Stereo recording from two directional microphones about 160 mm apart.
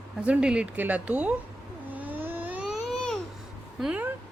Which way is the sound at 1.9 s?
10° right (ahead or behind).